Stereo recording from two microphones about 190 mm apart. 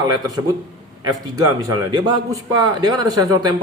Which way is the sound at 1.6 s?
20° right (ahead or behind).